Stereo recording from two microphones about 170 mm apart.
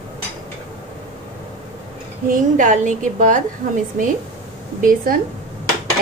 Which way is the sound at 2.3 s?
50° right (ahead or behind).